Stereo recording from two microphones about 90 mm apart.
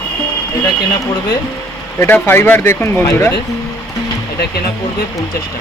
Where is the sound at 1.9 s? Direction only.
25° left (ahead or behind).